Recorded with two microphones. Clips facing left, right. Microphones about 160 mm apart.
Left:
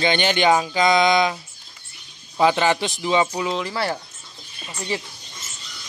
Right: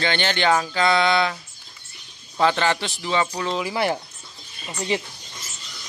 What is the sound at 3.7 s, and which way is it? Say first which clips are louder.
Speech: right 2 dB; 15° right (ahead or behind).